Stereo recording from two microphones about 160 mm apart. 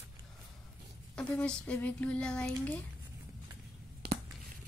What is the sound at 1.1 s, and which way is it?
Speech, 5° left (ahead or behind).